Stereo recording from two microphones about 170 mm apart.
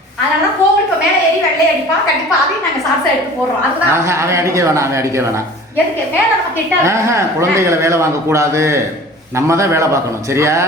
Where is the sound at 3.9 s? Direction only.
15° right (ahead or behind).